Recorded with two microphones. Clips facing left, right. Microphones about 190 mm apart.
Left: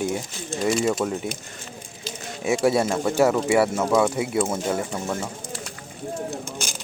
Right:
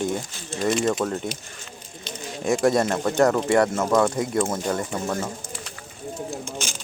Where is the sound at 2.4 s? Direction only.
10° left (ahead or behind).